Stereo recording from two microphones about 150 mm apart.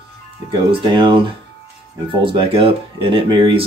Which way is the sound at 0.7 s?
35° right (ahead or behind).